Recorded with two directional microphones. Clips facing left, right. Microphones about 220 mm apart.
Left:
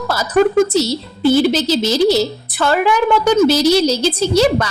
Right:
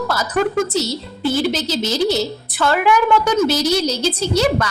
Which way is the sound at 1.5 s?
30° left (ahead or behind).